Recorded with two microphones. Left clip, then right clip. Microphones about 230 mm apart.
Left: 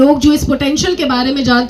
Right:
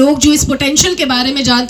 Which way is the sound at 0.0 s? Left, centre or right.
Right.